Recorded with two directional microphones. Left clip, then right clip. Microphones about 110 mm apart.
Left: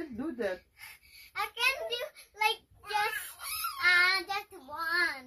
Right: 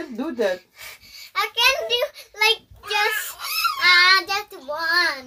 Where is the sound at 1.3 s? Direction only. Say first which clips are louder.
Right 11 dB; centre (ahead or behind).